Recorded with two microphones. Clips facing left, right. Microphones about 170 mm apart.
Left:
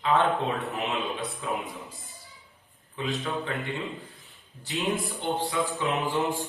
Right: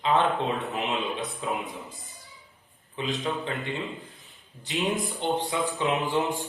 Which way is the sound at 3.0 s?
20° right (ahead or behind).